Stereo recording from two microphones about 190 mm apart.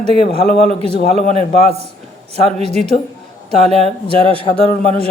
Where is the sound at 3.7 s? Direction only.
35° right (ahead or behind).